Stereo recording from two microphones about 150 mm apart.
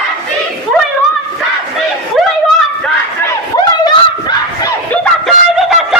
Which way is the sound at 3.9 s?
25° left (ahead or behind).